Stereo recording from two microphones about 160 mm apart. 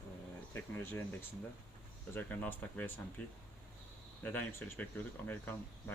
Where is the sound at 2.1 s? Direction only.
10° left (ahead or behind).